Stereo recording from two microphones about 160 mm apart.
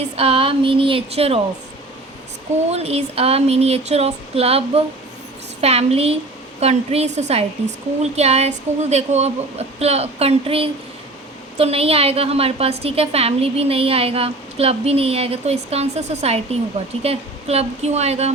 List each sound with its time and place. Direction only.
0.2 s a woman's voice: 35° right (ahead or behind)
2.6 s a woman's voice: 40° right (ahead or behind)